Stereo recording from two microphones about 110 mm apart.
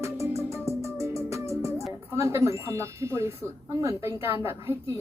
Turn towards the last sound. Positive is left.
turn(degrees=-20)  # may be behind; listen again after turning